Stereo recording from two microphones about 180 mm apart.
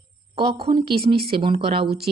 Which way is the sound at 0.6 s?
25° right (ahead or behind).